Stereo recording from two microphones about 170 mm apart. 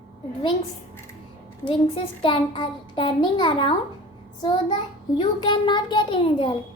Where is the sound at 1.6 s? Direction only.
30° left (ahead or behind).